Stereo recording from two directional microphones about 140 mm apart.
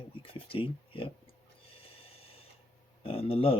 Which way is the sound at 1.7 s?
40° left (ahead or behind).